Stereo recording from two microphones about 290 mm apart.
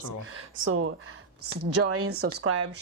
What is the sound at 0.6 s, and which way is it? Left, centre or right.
A woman's voice, right.